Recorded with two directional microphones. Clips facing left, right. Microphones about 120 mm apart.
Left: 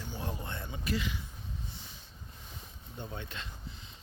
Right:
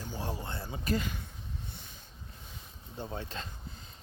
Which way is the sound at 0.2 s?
30° right (ahead or behind).